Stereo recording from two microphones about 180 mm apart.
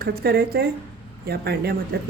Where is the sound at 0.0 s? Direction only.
60° right (ahead or behind).